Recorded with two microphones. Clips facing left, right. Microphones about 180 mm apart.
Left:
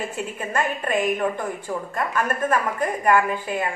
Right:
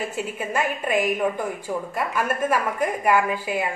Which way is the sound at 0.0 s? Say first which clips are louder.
Right 1 dB; 5° right (ahead or behind).